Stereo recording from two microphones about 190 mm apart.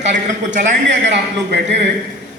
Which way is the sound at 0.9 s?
70° right (ahead or behind).